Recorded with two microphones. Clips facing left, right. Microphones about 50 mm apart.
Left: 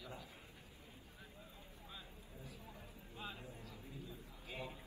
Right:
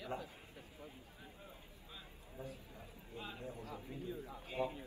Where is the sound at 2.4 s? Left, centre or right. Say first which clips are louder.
Right 6 dB; right.